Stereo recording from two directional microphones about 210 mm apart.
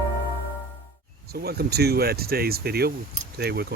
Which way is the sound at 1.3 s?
50° right (ahead or behind).